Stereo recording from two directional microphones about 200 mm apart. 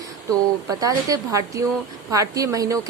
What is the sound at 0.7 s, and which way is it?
A woman's voice, 15° right (ahead or behind).